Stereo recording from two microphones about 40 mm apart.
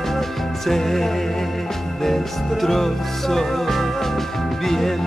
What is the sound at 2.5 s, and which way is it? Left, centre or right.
Music, centre.